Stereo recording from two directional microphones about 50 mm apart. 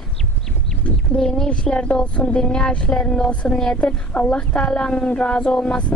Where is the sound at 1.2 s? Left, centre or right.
Centre.